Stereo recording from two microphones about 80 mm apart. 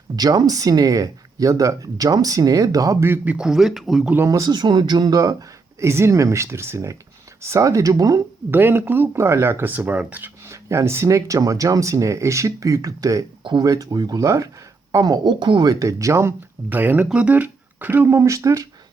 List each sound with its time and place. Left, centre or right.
0.2 s speech: right
3.0 s speech: right
3.3 s speech: centre
4.3 s speech: right
4.5 s speech: right
5.1 s speech: right
5.8 s speech: right
8.4 s speech: right
10.5 s speech: right
13.4 s speech: right
13.7 s speech: right
16.6 s speech: right
18.2 s speech: right